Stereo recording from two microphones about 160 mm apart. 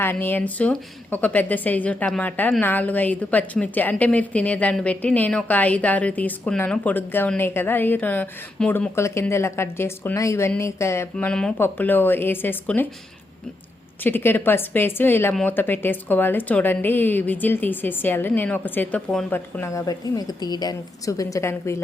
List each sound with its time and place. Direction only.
0.0 s a woman's voice: 15° left (ahead or behind)
14.0 s a woman's voice: 15° left (ahead or behind)